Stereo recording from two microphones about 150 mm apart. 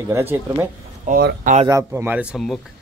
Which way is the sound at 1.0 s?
80° right.